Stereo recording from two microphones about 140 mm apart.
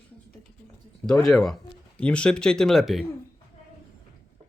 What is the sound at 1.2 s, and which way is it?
Speech, centre (ahead or behind).